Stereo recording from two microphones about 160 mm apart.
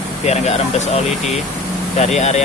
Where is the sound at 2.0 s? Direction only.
45° left (ahead or behind).